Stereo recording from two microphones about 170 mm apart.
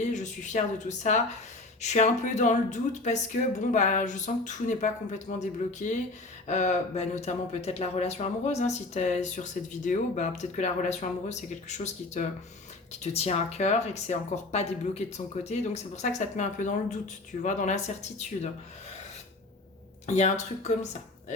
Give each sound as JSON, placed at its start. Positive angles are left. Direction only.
{"t": 0.0, "sound": "speech", "side_deg": 45}
{"t": 20.1, "sound": "speech", "side_deg": 45}